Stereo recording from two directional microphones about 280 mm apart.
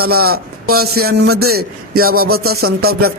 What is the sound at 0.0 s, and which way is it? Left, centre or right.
Speech, right.